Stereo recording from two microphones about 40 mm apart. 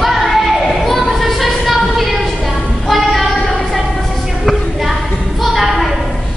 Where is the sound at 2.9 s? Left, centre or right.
Centre.